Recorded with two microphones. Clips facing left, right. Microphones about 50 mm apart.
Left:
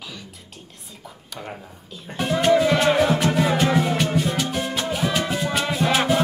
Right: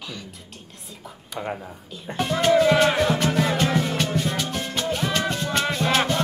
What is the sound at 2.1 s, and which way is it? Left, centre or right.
Music, centre.